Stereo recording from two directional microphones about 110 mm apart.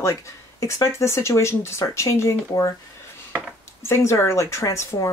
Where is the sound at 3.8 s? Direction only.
25° left (ahead or behind).